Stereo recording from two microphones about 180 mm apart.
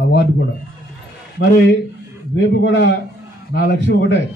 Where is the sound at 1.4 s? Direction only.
80° left.